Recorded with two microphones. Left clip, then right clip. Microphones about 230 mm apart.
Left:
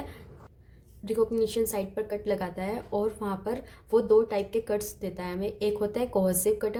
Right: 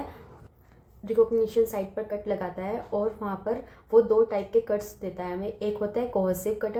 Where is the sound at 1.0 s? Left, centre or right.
Left.